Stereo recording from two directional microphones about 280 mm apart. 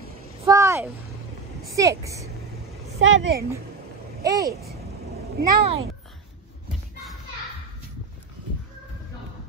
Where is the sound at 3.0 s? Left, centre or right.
Right.